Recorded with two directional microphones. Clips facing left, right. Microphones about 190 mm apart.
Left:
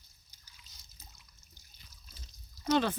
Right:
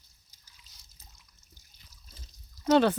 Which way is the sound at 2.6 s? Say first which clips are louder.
Right 7 dB; 75° right (ahead or behind).